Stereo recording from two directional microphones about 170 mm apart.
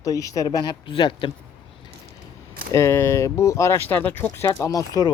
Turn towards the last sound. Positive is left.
turn(degrees=20)  # may be behind; listen again after turning